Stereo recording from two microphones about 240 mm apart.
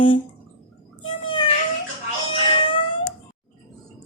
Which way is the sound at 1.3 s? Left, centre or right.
Left.